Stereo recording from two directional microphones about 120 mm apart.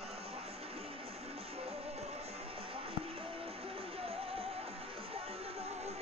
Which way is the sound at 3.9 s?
55° right (ahead or behind).